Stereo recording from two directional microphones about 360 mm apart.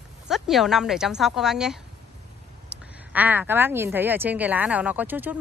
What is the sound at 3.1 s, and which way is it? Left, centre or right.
A woman's voice, centre.